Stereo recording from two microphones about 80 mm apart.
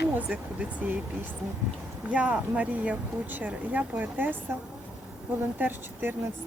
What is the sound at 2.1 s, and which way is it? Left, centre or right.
Speech, centre.